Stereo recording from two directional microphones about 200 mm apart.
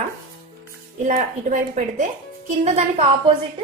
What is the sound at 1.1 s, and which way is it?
A woman's voice, 40° right (ahead or behind).